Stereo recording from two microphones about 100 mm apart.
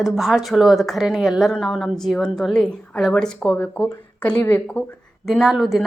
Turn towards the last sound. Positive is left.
turn(degrees=0)  # may be behind; listen again after turning